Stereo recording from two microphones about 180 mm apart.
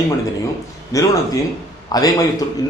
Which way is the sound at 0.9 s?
20° left (ahead or behind).